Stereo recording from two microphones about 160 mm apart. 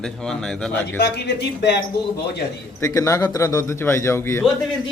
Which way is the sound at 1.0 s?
90° left.